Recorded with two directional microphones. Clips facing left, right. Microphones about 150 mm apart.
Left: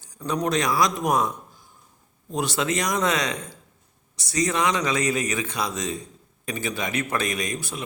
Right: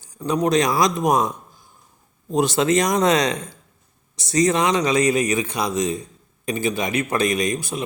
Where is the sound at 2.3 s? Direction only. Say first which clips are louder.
Right 7 dB; 20° right (ahead or behind).